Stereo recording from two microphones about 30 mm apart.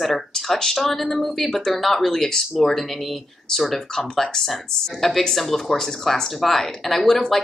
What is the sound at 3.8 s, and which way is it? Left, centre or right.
Speech, left.